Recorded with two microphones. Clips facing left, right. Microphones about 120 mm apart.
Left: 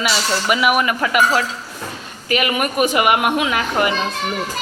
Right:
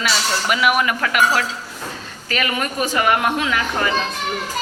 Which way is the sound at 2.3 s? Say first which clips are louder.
Left 4 dB; 15° left (ahead or behind).